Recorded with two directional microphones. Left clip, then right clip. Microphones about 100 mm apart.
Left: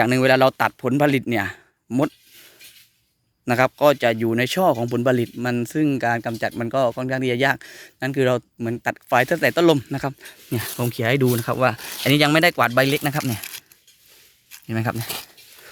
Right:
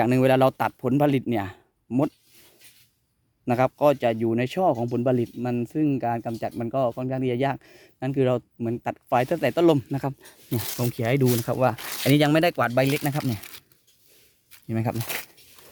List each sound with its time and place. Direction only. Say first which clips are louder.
0.0 s speech: left 3 dB; 25° right (ahead or behind)
3.4 s speech: left 4 dB; 15° right (ahead or behind)
4.7 s speech: left 4 dB; 5° left (ahead or behind); by 10.2 s 20° right (ahead or behind)
10.2 s speech: left 3 dB; centre (ahead or behind); by 15.3 s 20° right (ahead or behind)